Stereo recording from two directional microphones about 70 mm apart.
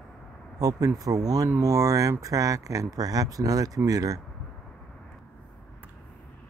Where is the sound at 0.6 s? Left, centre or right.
Right.